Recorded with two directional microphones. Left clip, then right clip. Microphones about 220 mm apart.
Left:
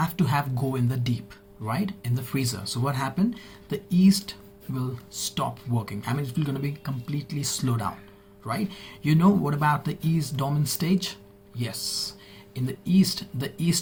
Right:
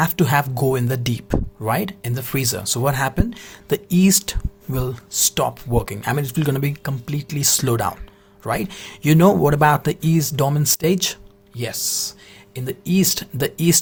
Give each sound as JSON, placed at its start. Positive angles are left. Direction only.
{"t": 0.0, "sound": "speech", "side_deg": -50}